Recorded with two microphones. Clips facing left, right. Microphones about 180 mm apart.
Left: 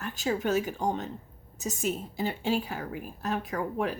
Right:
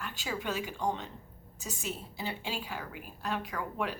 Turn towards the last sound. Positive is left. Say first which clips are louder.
# left 5 dB
turn(degrees=45)  # may be behind; listen again after turning